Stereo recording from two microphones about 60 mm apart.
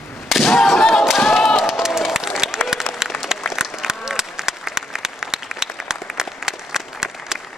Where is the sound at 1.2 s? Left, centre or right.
Centre.